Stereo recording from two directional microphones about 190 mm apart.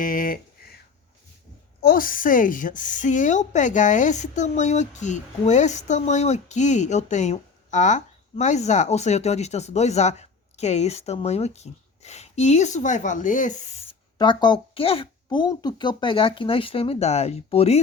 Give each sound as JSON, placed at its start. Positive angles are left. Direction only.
{"t": 0.0, "sound": "a sound", "side_deg": 45}
{"t": 1.8, "sound": "a woman's voice", "side_deg": 50}
{"t": 14.2, "sound": "speech", "side_deg": 25}